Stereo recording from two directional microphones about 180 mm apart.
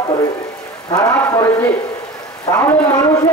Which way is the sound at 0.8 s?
20° left (ahead or behind).